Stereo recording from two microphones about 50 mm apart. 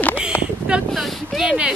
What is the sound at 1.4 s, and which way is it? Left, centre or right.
Speech, centre.